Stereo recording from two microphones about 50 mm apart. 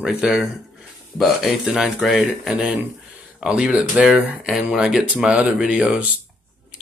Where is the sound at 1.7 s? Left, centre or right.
Centre.